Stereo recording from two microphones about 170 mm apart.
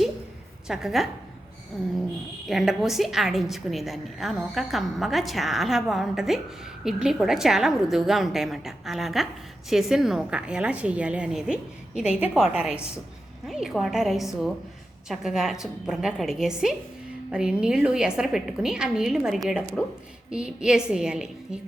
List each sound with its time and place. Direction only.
0.7 s a woman's voice: centre (ahead or behind)